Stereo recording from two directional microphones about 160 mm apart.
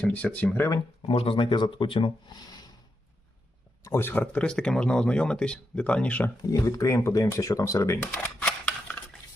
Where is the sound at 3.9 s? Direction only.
15° left (ahead or behind).